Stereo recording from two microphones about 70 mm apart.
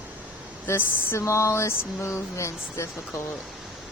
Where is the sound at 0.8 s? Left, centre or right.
Left.